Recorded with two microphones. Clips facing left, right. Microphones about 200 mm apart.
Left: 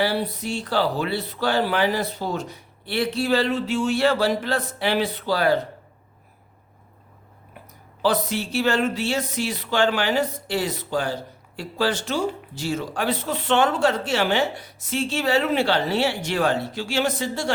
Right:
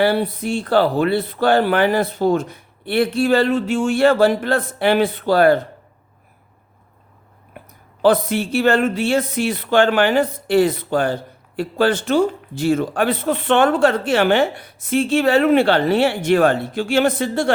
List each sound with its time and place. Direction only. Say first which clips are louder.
0.0 s speech: right 6 dB; 55° right (ahead or behind)
8.0 s speech: right 7 dB; 55° right (ahead or behind)